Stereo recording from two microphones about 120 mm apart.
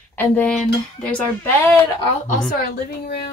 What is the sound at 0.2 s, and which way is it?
Speech, 10° left (ahead or behind).